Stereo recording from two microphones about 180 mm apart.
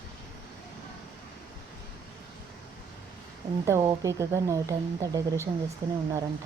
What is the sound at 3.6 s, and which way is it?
Speech, 15° right (ahead or behind).